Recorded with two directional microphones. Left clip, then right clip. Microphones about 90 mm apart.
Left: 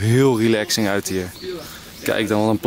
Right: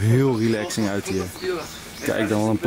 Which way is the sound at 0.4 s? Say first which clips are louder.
Left 5 dB; 20° left (ahead or behind).